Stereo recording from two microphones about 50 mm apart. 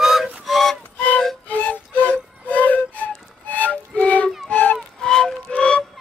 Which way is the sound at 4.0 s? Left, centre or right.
Left.